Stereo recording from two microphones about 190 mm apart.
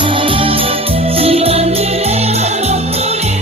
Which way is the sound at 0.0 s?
25° right (ahead or behind).